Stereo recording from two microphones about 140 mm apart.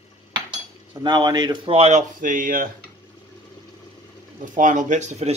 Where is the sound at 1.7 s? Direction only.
50° right (ahead or behind); by 2.7 s 80° right.